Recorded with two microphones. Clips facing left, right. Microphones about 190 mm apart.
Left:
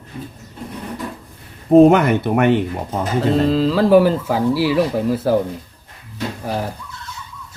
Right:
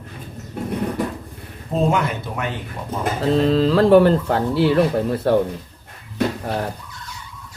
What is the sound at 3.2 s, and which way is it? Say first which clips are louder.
Speech: left 1 dB; centre (ahead or behind).